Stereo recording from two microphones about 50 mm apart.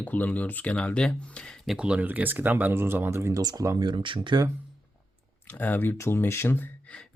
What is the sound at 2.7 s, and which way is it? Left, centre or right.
Speech, right.